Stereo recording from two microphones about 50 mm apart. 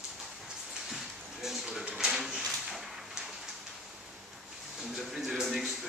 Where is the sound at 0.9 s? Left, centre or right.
Centre.